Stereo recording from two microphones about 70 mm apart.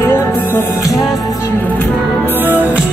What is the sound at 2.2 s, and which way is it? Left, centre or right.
Music, right.